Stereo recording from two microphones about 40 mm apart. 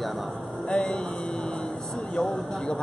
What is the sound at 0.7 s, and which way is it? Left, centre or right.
Speech, left.